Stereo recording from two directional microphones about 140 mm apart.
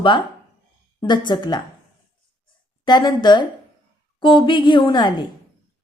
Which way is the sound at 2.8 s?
30° left (ahead or behind).